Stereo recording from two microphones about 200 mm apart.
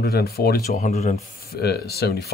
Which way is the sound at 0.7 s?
35° left (ahead or behind).